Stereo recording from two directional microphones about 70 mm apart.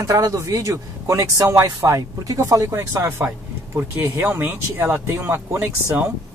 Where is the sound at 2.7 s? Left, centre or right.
Right.